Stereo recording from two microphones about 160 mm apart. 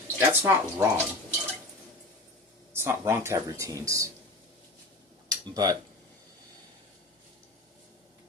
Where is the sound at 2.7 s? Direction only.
15° right (ahead or behind).